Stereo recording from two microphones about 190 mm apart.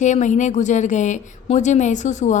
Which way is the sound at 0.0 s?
40° left (ahead or behind).